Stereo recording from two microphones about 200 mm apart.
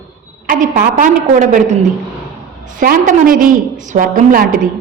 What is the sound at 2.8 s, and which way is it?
A woman's voice, 45° right (ahead or behind).